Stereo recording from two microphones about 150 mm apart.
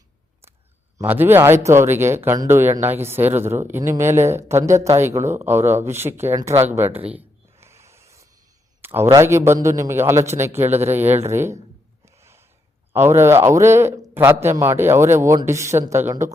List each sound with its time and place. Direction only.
0.9 s speech: 15° right (ahead or behind)
7.6 s snort: 20° right (ahead or behind)
8.8 s a man's voice: 15° right (ahead or behind)
12.0 s a sound: 20° right (ahead or behind)
12.9 s speech: 15° right (ahead or behind)